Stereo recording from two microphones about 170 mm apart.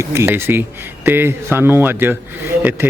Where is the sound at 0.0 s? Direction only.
15° right (ahead or behind).